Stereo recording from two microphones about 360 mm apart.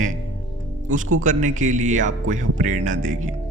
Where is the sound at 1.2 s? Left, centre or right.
Right.